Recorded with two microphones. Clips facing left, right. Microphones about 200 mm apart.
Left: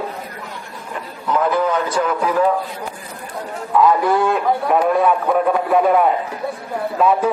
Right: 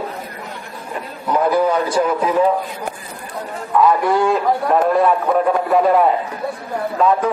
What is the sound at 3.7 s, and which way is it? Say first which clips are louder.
A man's voice: even; centre (ahead or behind).